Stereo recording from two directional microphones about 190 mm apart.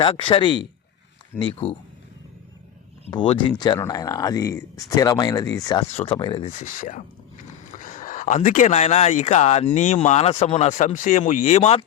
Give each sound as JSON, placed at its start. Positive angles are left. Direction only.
{"t": 0.0, "sound": "speech", "side_deg": 25}
{"t": 3.1, "sound": "speech", "side_deg": 25}
{"t": 5.9, "sound": "speech", "side_deg": 30}
{"t": 6.5, "sound": "speech", "side_deg": 40}